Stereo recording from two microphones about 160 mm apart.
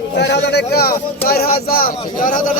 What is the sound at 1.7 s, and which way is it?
Speech, 60° left (ahead or behind).